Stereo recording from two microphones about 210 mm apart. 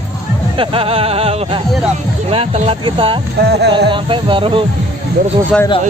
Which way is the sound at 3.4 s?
50° right (ahead or behind).